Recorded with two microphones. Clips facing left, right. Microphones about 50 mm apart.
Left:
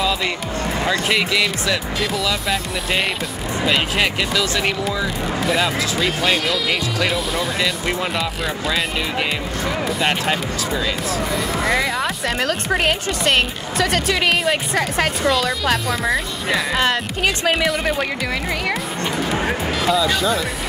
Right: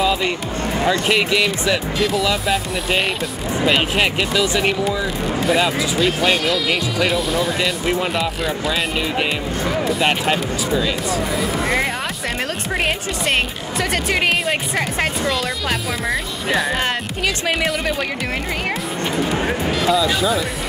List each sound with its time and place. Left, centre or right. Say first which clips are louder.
0.0 s music: right 2 dB; centre
0.7 s speech: right 2 dB; centre
2.0 s speech: right 3 dB; centre
15.4 s speech: left 3 dB; centre
19.1 s speech: right 1 dB; centre